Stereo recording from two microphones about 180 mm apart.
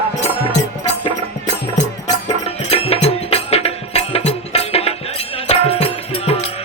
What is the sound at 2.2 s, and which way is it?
Music, 35° left (ahead or behind).